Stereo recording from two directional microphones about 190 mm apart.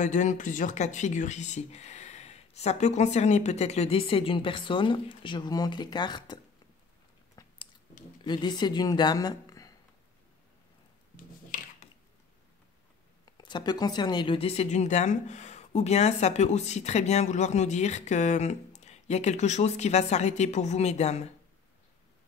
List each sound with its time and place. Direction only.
0.0 s speech: 40° left (ahead or behind); by 6.4 s 25° left (ahead or behind)
8.2 s speech: 25° left (ahead or behind)
13.2 s speech: 25° left (ahead or behind)